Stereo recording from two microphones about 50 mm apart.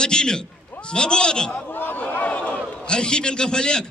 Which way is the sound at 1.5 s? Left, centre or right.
Left.